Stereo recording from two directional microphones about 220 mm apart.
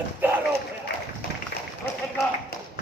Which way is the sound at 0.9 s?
55° left (ahead or behind).